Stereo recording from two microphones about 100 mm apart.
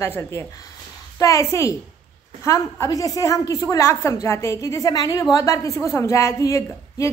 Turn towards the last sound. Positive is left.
turn(degrees=30)  # may be behind; listen again after turning